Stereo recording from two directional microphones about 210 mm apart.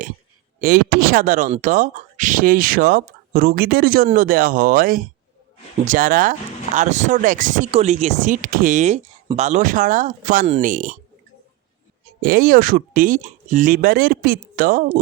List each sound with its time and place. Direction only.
0.6 s speech: 45° right (ahead or behind)
12.2 s speech: 45° right (ahead or behind)